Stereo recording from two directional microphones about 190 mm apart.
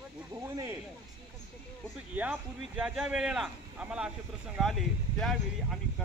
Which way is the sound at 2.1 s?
5° right (ahead or behind).